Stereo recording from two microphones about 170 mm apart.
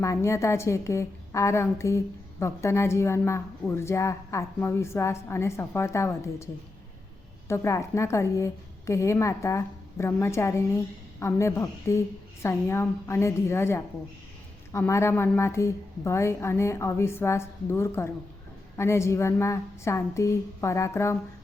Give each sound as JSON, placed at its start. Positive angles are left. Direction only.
{"t": 0.0, "sound": "a woman's voice", "side_deg": 15}